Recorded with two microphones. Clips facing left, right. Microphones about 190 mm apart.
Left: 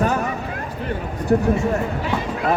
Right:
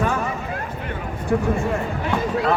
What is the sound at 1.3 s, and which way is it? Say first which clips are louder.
Speech: left 3 dB; 45° left (ahead or behind).